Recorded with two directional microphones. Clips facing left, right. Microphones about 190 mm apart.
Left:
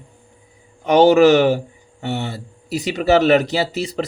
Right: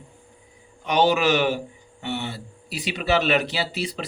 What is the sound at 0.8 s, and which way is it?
Speech, 45° left (ahead or behind).